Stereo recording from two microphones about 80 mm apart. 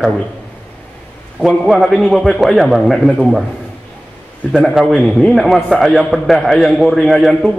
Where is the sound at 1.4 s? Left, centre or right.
Centre.